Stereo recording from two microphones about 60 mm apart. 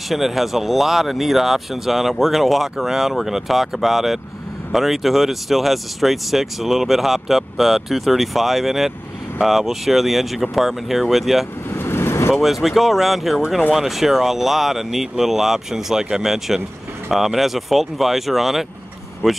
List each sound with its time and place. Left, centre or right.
0.1 s speech: centre
11.7 s vehicle: left
12.3 s speech: centre